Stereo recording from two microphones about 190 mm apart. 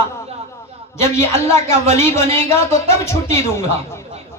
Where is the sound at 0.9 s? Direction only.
15° left (ahead or behind).